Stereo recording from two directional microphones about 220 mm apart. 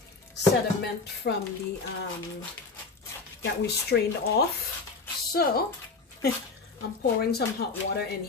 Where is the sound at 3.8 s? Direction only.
45° left (ahead or behind).